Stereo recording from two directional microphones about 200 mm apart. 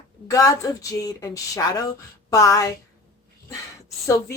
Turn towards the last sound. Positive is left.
turn(degrees=15)  # may be behind; listen again after turning